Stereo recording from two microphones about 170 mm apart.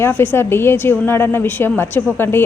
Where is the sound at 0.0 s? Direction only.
10° left (ahead or behind).